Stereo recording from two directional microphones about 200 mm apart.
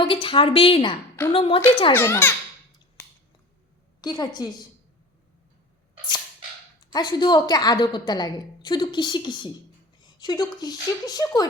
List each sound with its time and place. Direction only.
0.0 s a woman's voice: 25° left (ahead or behind)
1.9 s a child's voice: 10° left (ahead or behind)
4.0 s a woman's voice: 20° left (ahead or behind)
6.9 s a woman's voice: 20° left (ahead or behind)